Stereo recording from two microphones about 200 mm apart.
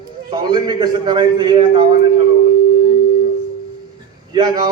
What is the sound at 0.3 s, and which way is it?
A man's voice, 20° right (ahead or behind).